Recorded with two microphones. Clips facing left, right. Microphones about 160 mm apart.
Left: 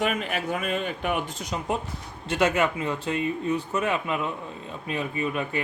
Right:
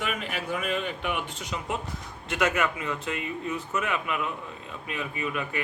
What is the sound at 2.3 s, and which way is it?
A man's voice, 30° left (ahead or behind).